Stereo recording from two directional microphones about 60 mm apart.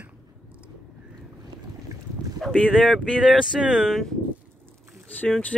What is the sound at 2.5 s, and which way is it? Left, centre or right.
Speech, centre.